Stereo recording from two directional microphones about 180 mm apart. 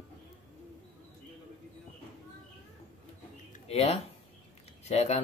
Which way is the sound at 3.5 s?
35° left (ahead or behind).